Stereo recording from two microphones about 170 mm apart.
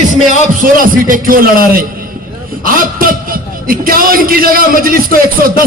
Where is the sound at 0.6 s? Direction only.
55° right (ahead or behind).